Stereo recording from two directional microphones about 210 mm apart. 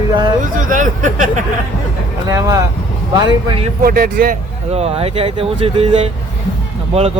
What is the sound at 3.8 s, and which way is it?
Speech, 45° right (ahead or behind).